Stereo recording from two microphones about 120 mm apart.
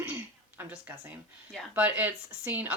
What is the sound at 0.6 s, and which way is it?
Speech, 15° right (ahead or behind).